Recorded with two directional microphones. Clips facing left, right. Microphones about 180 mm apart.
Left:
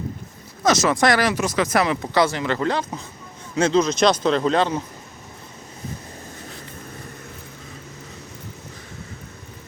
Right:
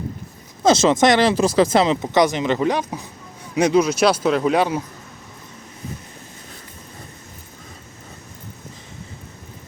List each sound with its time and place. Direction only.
0.6 s speech: 25° right (ahead or behind); by 4.8 s 10° right (ahead or behind)